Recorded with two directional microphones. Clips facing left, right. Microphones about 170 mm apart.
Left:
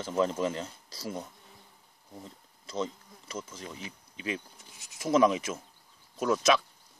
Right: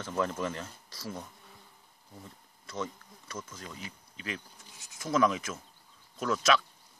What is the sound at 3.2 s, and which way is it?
Bee, 15° left (ahead or behind).